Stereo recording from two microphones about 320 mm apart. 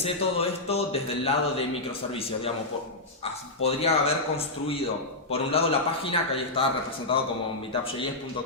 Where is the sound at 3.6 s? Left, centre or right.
Centre.